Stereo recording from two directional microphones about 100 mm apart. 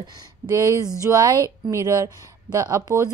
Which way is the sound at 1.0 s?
35° right (ahead or behind).